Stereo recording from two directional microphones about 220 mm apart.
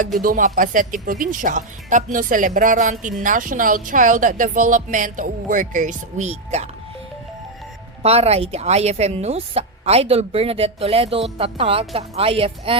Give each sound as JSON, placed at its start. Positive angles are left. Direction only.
{"t": 0.0, "sound": "speech", "side_deg": -40}
{"t": 8.0, "sound": "speech", "side_deg": -30}